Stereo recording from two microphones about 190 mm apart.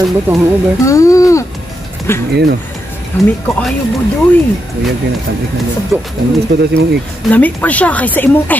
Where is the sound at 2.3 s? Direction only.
60° right (ahead or behind).